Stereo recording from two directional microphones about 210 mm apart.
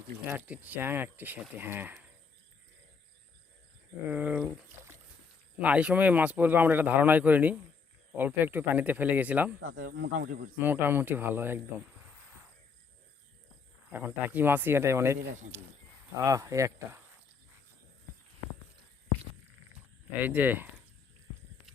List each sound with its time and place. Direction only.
0.3 s speech: 10° right (ahead or behind)
4.0 s speech: 5° right (ahead or behind)
9.6 s speech: 60° right (ahead or behind)
10.2 s speech: 45° right (ahead or behind)
10.6 s speech: 10° right (ahead or behind)
13.9 s speech: 10° right (ahead or behind)
20.1 s speech: 5° right (ahead or behind)